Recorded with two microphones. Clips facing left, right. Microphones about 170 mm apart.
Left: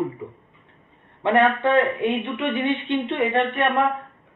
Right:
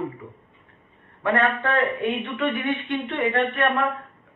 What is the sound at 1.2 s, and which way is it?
A man's voice, 20° left (ahead or behind).